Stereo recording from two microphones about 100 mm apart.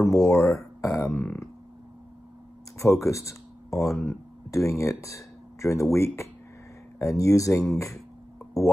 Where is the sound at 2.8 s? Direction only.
30° left (ahead or behind).